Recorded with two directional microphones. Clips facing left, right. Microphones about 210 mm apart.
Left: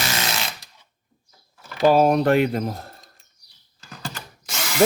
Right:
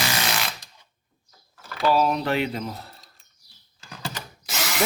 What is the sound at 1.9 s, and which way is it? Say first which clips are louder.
Speech: left 5 dB; 50° left (ahead or behind).